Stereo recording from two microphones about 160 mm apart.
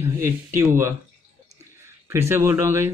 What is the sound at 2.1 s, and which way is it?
Speech, 15° right (ahead or behind).